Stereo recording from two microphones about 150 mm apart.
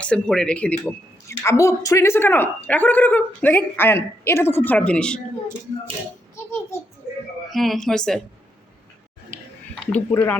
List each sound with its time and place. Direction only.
0.0 s speech: 5° left (ahead or behind)
6.3 s a sound: 20° left (ahead or behind)
7.5 s speech: centre (ahead or behind)
9.9 s speech: 15° left (ahead or behind)